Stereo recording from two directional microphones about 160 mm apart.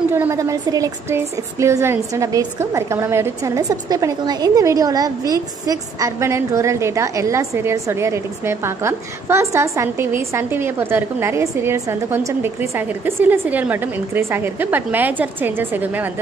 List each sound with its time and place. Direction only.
0.1 s a woman's voice: 15° right (ahead or behind)